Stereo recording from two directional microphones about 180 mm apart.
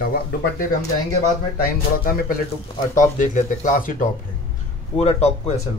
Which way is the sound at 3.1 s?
45° left (ahead or behind).